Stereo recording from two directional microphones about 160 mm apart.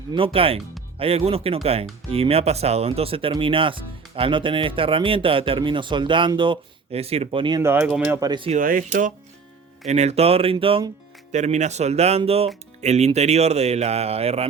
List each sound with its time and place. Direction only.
0.1 s speech: 35° right (ahead or behind)
7.6 s speech: 15° right (ahead or behind)
8.2 s speech: 25° right (ahead or behind)
8.4 s speech: 55° right (ahead or behind)
9.8 s speech: 45° right (ahead or behind)
11.3 s speech: 45° right (ahead or behind)